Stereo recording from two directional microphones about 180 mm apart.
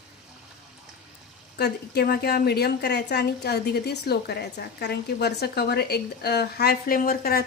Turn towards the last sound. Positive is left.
turn(degrees=60)  # may be behind; listen again after turning